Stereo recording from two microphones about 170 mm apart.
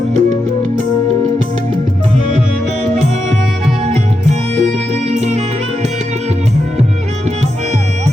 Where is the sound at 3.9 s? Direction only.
40° right (ahead or behind).